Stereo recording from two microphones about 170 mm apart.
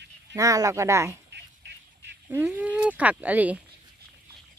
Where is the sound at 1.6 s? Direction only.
90° right.